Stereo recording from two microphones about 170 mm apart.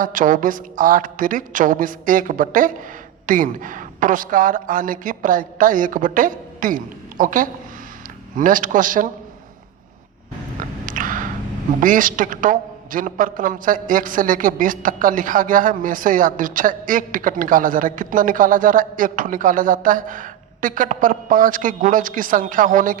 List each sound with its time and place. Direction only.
0.0 s a man's voice: 50° right (ahead or behind)
10.8 s a sound: 50° right (ahead or behind)
11.8 s a man's voice: 50° right (ahead or behind)